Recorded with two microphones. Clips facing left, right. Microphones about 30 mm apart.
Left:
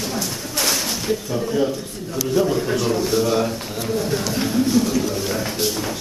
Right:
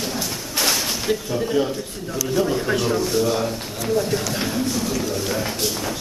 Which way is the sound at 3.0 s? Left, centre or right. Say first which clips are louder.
Left 2 dB; centre.